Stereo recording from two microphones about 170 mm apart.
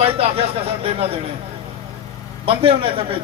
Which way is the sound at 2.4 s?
30° right (ahead or behind).